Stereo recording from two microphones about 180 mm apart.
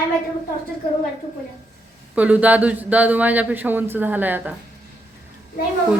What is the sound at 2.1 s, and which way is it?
Speech, 10° right (ahead or behind).